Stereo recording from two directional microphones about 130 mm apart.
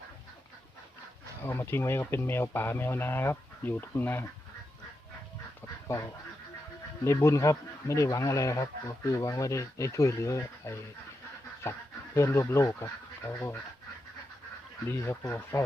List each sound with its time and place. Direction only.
1.5 s speech: 20° left (ahead or behind)
7.0 s speech: 20° left (ahead or behind)
14.8 s speech: 20° left (ahead or behind)